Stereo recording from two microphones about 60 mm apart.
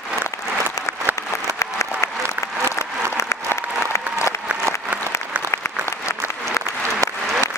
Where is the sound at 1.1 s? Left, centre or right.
Right.